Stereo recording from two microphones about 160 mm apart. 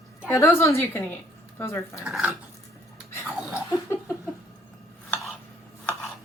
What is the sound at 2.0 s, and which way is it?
Speech, 5° right (ahead or behind).